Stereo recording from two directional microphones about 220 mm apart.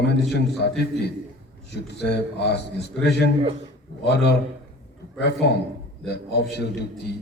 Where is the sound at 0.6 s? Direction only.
50° left (ahead or behind).